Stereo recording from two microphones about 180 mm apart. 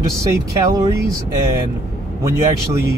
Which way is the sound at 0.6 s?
20° right (ahead or behind).